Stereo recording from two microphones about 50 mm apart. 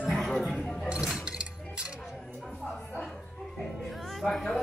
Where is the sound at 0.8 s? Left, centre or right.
Right.